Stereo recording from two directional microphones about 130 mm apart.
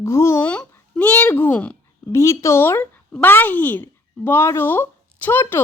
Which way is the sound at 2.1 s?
20° left (ahead or behind).